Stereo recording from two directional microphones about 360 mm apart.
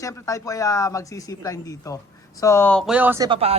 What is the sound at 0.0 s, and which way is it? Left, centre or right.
A man's voice, centre.